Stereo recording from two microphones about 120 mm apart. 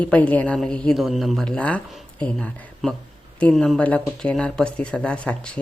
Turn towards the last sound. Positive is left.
turn(degrees=10)  # may be behind; listen again after turning